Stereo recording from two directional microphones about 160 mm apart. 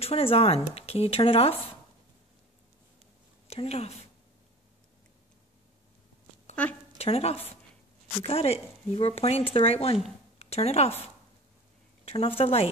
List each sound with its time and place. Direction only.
0.0 s speech: 40° left (ahead or behind)
3.4 s a woman's voice: 40° left (ahead or behind)
6.5 s a woman's voice: 10° left (ahead or behind)
7.0 s speech: 40° left (ahead or behind)
12.0 s speech: 35° left (ahead or behind)